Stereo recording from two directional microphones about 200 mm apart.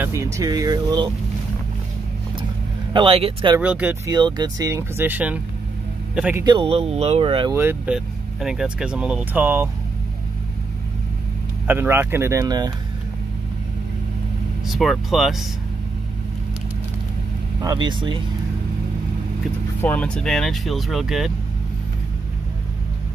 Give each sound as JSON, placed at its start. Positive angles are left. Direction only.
{"t": 0.0, "sound": "speech", "side_deg": -15}
{"t": 2.9, "sound": "speech", "side_deg": -25}
{"t": 3.5, "sound": "speech", "side_deg": -10}
{"t": 4.1, "sound": "speech", "side_deg": -20}
{"t": 6.4, "sound": "speech", "side_deg": -25}
{"t": 7.5, "sound": "speech", "side_deg": -10}
{"t": 11.6, "sound": "speech", "side_deg": -10}
{"t": 14.6, "sound": "speech", "side_deg": 0}
{"t": 17.6, "sound": "speech", "side_deg": -20}
{"t": 19.8, "sound": "speech", "side_deg": 5}